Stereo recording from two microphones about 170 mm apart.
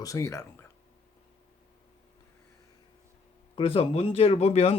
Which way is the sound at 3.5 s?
35° left (ahead or behind).